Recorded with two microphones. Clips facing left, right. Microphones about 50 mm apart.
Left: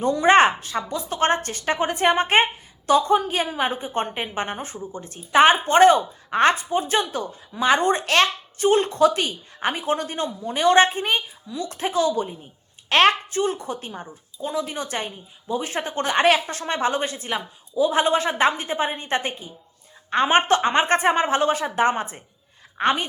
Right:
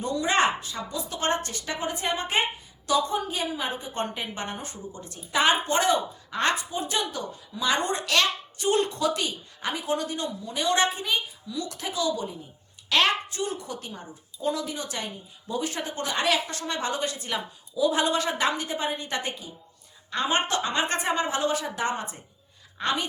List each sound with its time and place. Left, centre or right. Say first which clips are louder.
0.0 s a woman's voice: left 8 dB; left